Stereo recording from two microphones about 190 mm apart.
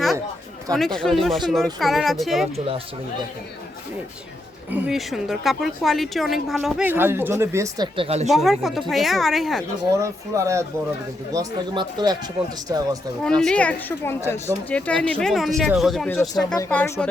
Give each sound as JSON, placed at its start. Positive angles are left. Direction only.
{"t": 0.7, "sound": "a woman's voice", "side_deg": 5}
{"t": 4.7, "sound": "a woman's voice", "side_deg": 0}
{"t": 7.9, "sound": "speech", "side_deg": -30}
{"t": 8.3, "sound": "a woman's voice", "side_deg": 0}
{"t": 10.0, "sound": "speech", "side_deg": -15}
{"t": 13.2, "sound": "a woman's voice", "side_deg": 5}
{"t": 16.6, "sound": "speech", "side_deg": 10}